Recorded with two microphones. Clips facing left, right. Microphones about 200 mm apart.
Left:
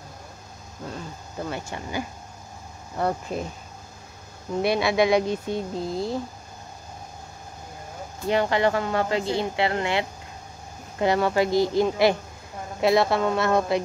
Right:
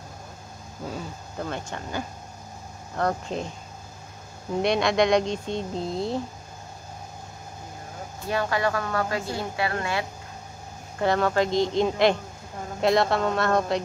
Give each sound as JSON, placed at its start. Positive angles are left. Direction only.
{"t": 1.4, "sound": "speech", "side_deg": 10}
{"t": 4.6, "sound": "speech", "side_deg": 5}
{"t": 8.3, "sound": "speech", "side_deg": 20}
{"t": 11.0, "sound": "speech", "side_deg": 15}